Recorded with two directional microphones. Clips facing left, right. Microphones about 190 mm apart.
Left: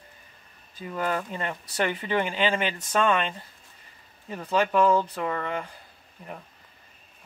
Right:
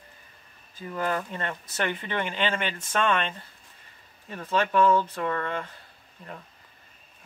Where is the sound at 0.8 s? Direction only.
15° left (ahead or behind).